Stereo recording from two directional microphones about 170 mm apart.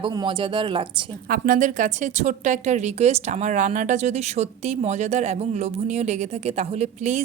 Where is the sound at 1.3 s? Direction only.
50° right (ahead or behind).